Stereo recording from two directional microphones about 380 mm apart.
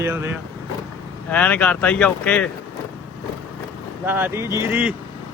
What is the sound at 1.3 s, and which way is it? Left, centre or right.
Speech, centre.